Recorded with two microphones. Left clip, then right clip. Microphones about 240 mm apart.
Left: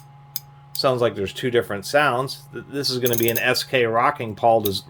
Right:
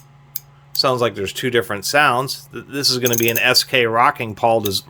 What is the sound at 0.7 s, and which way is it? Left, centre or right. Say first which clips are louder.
Speech: right 3 dB; centre.